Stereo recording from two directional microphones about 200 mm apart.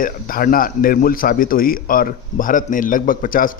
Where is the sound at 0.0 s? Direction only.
45° left (ahead or behind).